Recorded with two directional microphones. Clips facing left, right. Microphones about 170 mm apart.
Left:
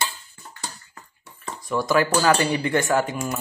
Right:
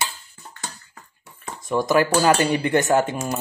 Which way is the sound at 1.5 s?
20° right (ahead or behind).